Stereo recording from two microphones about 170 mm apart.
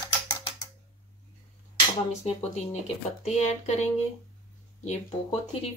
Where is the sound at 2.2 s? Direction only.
40° left (ahead or behind).